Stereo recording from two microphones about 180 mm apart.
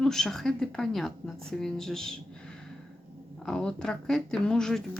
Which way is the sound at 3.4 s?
5° left (ahead or behind).